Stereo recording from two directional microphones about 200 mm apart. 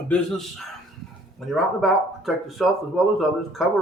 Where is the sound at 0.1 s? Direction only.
Centre (ahead or behind).